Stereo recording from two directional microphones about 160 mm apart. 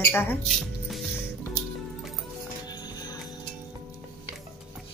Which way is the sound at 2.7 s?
25° left (ahead or behind).